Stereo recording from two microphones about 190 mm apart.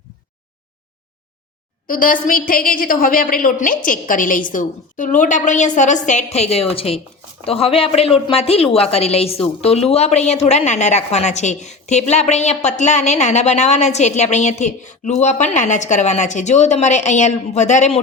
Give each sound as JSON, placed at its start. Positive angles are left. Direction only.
{"t": 1.9, "sound": "a woman's voice", "side_deg": 45}